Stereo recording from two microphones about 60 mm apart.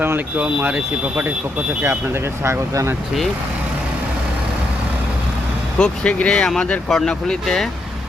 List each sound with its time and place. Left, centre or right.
0.7 s speech: right
2.4 s speech: right
5.8 s speech: centre
6.8 s speech: centre